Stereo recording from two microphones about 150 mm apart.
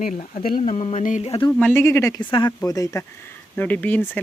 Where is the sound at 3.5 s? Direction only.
10° left (ahead or behind).